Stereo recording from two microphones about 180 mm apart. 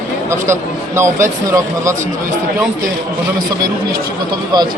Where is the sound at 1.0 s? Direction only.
15° right (ahead or behind).